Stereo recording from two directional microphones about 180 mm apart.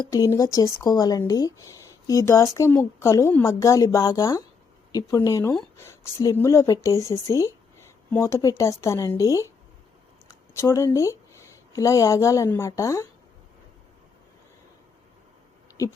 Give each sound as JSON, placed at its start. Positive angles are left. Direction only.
{"t": 0.1, "sound": "speech", "side_deg": 20}